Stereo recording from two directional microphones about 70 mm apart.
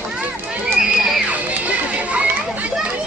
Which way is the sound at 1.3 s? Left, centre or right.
Centre.